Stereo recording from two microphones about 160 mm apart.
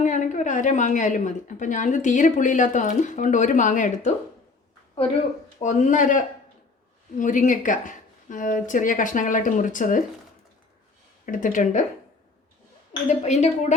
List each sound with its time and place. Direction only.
0.0 s speech: 50° left (ahead or behind)
5.5 s speech: 50° left (ahead or behind)
11.3 s speech: 55° left (ahead or behind)
13.1 s speech: 45° left (ahead or behind)